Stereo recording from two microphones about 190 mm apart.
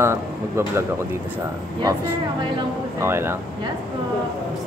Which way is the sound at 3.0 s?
10° right (ahead or behind).